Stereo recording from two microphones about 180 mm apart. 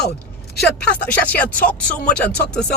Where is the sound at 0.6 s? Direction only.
10° left (ahead or behind).